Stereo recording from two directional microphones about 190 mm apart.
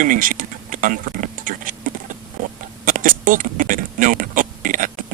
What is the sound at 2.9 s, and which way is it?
Beatboxing, 45° right (ahead or behind).